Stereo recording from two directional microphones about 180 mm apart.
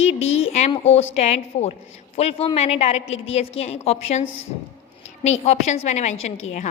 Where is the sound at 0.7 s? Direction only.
35° left (ahead or behind).